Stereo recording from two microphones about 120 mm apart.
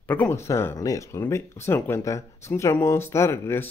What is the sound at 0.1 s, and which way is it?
Speech, 20° left (ahead or behind).